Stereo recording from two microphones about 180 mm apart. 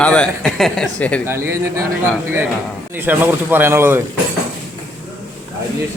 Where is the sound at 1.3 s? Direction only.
15° right (ahead or behind).